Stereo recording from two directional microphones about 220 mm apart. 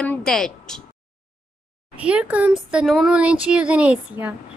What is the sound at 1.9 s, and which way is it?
Speech, 5° right (ahead or behind).